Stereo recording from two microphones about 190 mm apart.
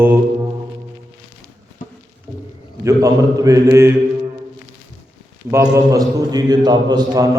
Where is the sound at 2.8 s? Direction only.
15° right (ahead or behind).